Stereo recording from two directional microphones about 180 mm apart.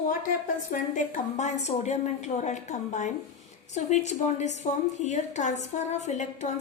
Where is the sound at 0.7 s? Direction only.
45° left (ahead or behind).